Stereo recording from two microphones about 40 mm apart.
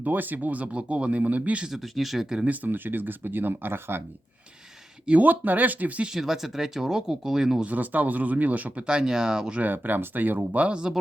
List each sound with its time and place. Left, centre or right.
0.0 s speech: right
1.7 s speech: centre
2.5 s speech: right
5.0 s speech: right
6.1 s speech: centre
7.6 s speech: right
8.9 s speech: centre
9.6 s speech: right
10.6 s speech: right